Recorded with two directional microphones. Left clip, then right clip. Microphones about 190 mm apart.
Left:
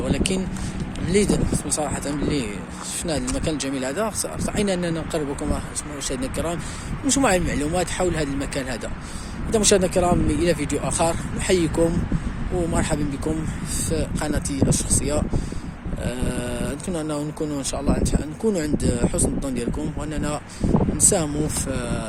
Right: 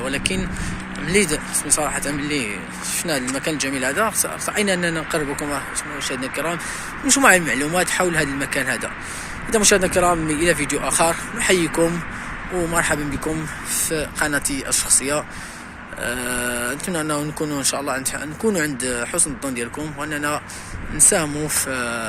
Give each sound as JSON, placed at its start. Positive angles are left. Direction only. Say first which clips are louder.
{"t": 0.0, "sound": "speech", "louder": "right 2 dB", "side_deg": 15}
{"t": 21.1, "sound": "speech", "louder": "right 2 dB", "side_deg": 15}